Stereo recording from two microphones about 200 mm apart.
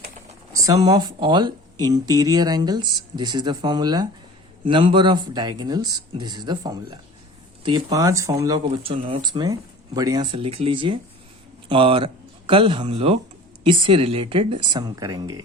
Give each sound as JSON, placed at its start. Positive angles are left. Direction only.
{"t": 0.5, "sound": "speech", "side_deg": -15}